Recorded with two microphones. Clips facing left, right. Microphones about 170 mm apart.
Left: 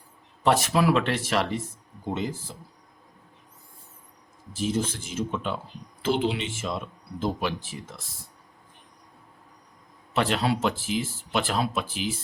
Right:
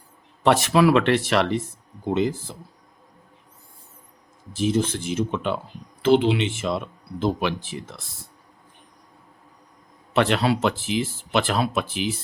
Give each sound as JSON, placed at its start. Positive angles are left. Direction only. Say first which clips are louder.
{"t": 0.4, "sound": "speech", "louder": "right 4 dB", "side_deg": -75}
{"t": 4.5, "sound": "speech", "louder": "right 5 dB", "side_deg": -70}
{"t": 10.2, "sound": "speech", "louder": "right 4 dB", "side_deg": -70}